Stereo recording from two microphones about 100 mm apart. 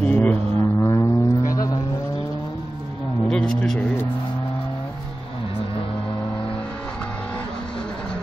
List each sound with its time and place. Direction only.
0.0 s didgeridoo: 15° left (ahead or behind)
0.8 s vehicle: 30° left (ahead or behind)
3.3 s a sound: 5° left (ahead or behind)